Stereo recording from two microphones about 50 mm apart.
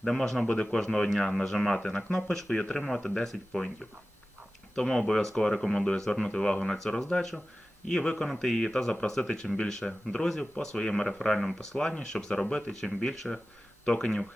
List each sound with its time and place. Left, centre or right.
0.0 s speech: centre
2.8 s speech: centre
4.7 s speech: centre
11.7 s speech: centre
13.8 s speech: centre